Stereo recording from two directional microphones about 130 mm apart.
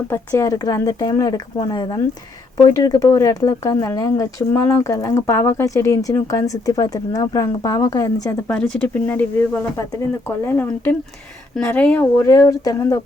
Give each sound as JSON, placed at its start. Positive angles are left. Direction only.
{"t": 0.1, "sound": "speech", "side_deg": 20}
{"t": 8.4, "sound": "speech", "side_deg": 10}
{"t": 12.2, "sound": "speech", "side_deg": 25}